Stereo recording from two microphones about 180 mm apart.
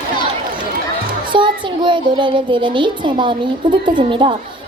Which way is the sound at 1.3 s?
25° right (ahead or behind).